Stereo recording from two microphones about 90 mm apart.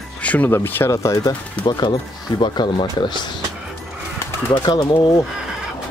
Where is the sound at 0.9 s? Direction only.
40° left (ahead or behind); by 3.3 s 55° left (ahead or behind).